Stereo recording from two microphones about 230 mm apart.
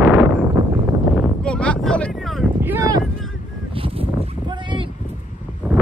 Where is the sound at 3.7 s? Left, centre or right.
Right.